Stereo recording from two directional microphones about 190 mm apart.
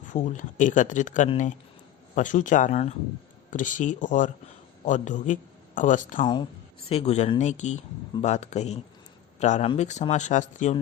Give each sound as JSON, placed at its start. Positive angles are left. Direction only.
{"t": 0.1, "sound": "speech", "side_deg": 40}
{"t": 6.2, "sound": "speech", "side_deg": 25}